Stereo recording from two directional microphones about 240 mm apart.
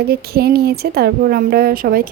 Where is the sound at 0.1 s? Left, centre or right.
Right.